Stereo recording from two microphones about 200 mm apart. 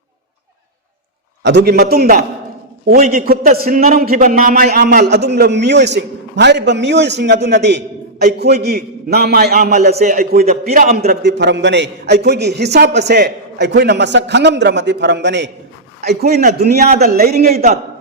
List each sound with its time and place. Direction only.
1.5 s a man's voice: 55° right (ahead or behind)